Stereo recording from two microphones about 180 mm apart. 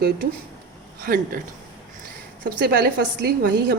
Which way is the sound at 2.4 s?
60° right (ahead or behind).